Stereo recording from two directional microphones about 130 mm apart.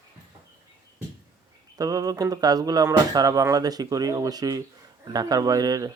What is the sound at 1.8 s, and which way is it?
Speech, 30° right (ahead or behind).